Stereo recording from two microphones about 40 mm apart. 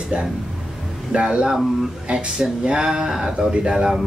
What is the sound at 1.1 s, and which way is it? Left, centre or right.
Speech, right.